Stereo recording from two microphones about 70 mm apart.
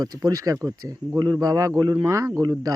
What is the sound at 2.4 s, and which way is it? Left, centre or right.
Speech, right.